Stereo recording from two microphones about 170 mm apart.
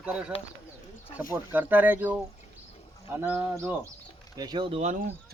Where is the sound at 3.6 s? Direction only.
15° right (ahead or behind); by 5.0 s 40° right (ahead or behind).